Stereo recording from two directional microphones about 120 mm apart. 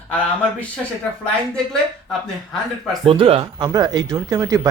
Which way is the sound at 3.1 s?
50° right (ahead or behind).